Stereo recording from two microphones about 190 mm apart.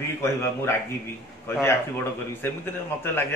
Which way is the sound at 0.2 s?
15° left (ahead or behind).